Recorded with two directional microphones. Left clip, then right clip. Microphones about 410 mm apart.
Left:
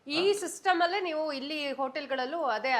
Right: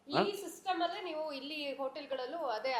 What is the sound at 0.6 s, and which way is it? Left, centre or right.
A woman's voice, left.